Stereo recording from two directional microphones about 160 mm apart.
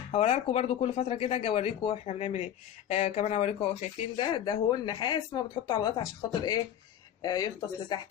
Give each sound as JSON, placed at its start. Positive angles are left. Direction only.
{"t": 0.1, "sound": "speech", "side_deg": 35}
{"t": 7.2, "sound": "speech", "side_deg": 25}